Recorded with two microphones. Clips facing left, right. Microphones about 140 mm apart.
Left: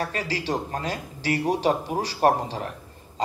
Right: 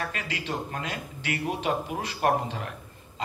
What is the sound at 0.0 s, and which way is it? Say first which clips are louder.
A man's voice: left 5 dB; 35° left (ahead or behind).